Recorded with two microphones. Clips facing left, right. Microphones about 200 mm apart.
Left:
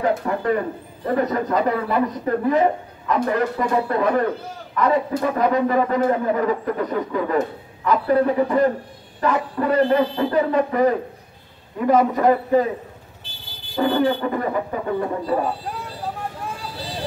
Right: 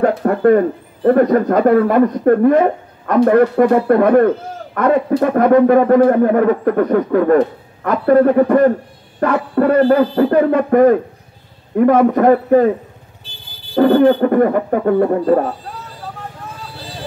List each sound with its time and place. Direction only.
0.0 s a sound: 60° right (ahead or behind)
1.0 s speech: 55° right (ahead or behind)
13.7 s speech: 55° right (ahead or behind)